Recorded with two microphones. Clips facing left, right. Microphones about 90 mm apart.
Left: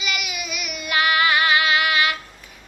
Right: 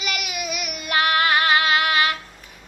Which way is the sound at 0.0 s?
45° right (ahead or behind).